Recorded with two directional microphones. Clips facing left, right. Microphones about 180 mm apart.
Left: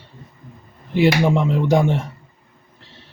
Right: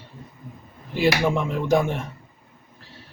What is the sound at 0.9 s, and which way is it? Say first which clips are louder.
Speech: left 5 dB; 20° left (ahead or behind).